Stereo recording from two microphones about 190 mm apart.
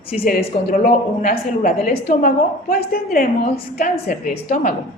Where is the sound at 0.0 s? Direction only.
30° left (ahead or behind).